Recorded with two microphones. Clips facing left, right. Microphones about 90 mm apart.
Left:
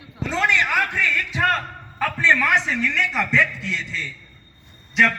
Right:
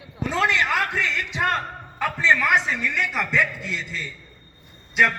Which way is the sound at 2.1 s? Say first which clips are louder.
Even; 5° right (ahead or behind).